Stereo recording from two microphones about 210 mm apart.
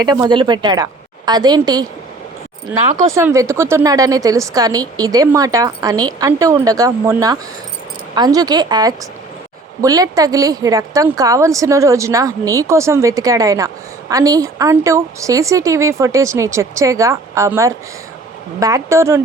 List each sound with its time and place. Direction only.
0.0 s a woman's voice: 20° right (ahead or behind)
3.1 s a woman's voice: 15° right (ahead or behind)